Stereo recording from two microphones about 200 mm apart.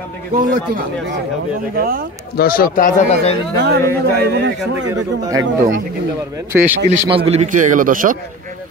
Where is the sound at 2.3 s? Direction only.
45° left (ahead or behind).